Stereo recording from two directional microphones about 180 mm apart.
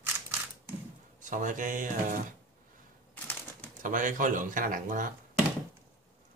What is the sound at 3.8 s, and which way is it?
Speech, 45° right (ahead or behind).